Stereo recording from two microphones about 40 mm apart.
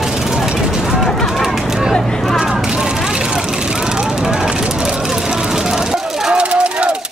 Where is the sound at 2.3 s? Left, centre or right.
Centre.